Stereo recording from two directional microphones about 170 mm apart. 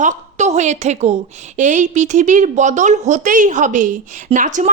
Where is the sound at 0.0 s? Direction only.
45° right (ahead or behind).